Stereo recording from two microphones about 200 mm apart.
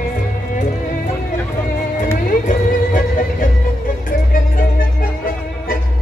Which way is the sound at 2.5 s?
40° left (ahead or behind).